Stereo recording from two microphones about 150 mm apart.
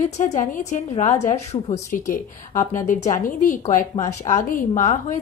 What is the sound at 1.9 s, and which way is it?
Speech, 60° left (ahead or behind).